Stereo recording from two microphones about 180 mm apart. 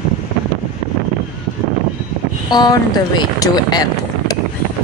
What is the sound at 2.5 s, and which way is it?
Speech, 25° left (ahead or behind).